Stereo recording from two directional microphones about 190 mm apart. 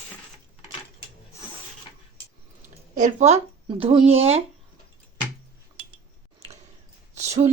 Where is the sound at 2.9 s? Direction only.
35° right (ahead or behind).